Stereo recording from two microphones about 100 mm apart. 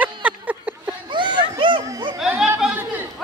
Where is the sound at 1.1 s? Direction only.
55° right (ahead or behind).